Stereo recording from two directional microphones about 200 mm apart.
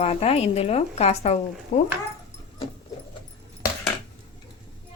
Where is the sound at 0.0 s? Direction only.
30° left (ahead or behind).